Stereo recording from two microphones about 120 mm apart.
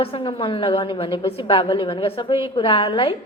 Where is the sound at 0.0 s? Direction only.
50° left (ahead or behind).